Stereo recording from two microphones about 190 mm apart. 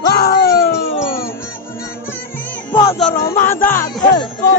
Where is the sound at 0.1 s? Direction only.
55° left (ahead or behind).